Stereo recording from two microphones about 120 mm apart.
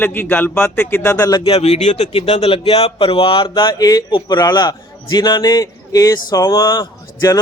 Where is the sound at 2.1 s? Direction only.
50° left (ahead or behind).